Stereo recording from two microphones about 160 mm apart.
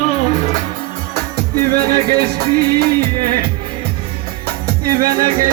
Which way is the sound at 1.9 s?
75° right (ahead or behind).